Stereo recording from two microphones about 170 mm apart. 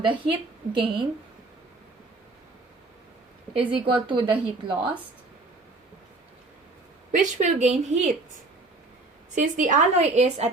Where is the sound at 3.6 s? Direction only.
30° right (ahead or behind).